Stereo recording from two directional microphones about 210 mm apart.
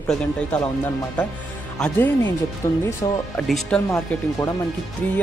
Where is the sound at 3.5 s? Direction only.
Centre (ahead or behind).